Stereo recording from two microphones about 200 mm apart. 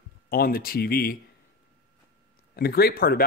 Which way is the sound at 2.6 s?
50° left (ahead or behind).